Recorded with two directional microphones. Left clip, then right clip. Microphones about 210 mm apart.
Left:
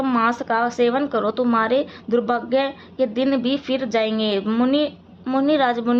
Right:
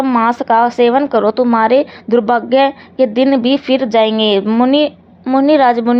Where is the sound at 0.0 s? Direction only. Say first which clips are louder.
Right 7 dB; 20° right (ahead or behind).